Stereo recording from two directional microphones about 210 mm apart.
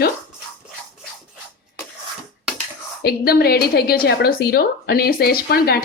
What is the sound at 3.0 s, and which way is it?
Speech, 45° left (ahead or behind).